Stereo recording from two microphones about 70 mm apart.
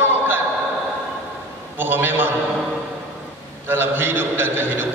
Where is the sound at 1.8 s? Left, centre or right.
Right.